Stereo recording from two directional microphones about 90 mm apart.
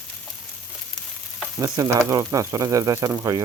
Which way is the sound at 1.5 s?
40° right (ahead or behind).